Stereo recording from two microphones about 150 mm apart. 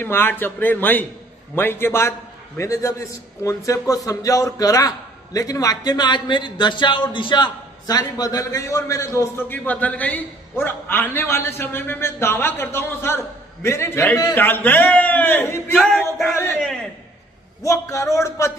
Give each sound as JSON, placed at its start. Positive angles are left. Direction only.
{"t": 0.0, "sound": "a man's voice", "side_deg": 15}
{"t": 15.7, "sound": "a sound", "side_deg": 0}
{"t": 17.6, "sound": "a man's voice", "side_deg": 20}